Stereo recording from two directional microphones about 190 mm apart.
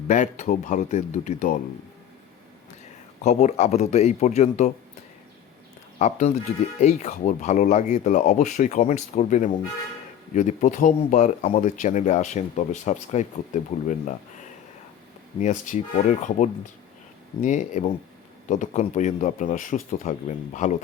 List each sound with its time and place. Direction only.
0.1 s speech: 40° left (ahead or behind)
3.2 s speech: 35° left (ahead or behind)
6.0 s speech: 40° left (ahead or behind)
15.4 s speech: 40° left (ahead or behind)